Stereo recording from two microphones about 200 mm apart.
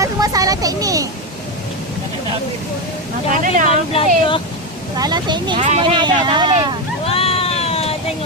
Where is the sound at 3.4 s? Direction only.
40° right (ahead or behind).